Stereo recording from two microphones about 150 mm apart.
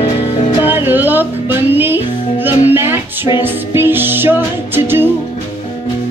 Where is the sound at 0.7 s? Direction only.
15° right (ahead or behind).